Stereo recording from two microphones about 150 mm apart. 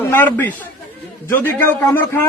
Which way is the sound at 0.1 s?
10° left (ahead or behind).